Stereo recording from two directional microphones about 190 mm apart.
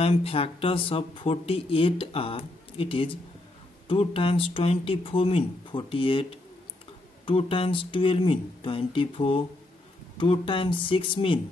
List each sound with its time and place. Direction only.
0.0 s speech: 30° left (ahead or behind)
7.2 s speech: 30° left (ahead or behind)